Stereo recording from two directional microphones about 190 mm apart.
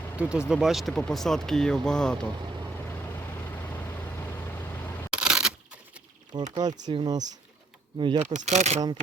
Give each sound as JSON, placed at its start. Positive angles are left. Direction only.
{"t": 0.2, "sound": "speech", "side_deg": -5}
{"t": 3.3, "sound": "vehicle", "side_deg": 10}
{"t": 5.1, "sound": "a sound", "side_deg": -5}
{"t": 6.5, "sound": "speech", "side_deg": -20}
{"t": 8.2, "sound": "speech", "side_deg": -40}